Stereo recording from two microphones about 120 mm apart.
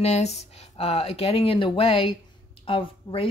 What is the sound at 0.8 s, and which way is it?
Speech, 55° left (ahead or behind).